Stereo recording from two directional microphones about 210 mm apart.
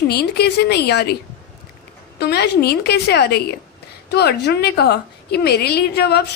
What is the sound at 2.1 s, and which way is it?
A woman's voice, 50° left (ahead or behind).